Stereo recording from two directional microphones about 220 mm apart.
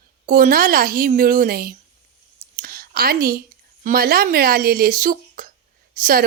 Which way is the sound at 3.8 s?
40° right (ahead or behind).